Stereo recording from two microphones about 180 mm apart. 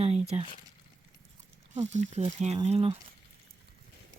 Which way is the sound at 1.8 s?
40° right (ahead or behind).